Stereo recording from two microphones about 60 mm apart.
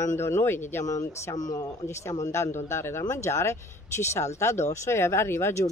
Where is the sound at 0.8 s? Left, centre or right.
Left.